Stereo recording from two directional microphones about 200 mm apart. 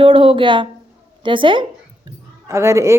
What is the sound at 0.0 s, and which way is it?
Speech, 25° right (ahead or behind).